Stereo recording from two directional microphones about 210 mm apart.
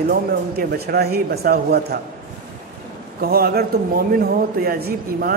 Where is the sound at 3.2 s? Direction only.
45° right (ahead or behind).